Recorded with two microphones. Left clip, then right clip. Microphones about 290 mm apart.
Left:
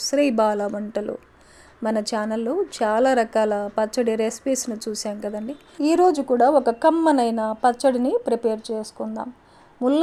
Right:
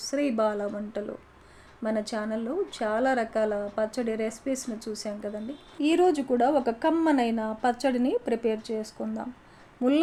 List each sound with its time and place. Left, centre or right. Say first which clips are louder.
0.0 s a woman's voice: left 7 dB; left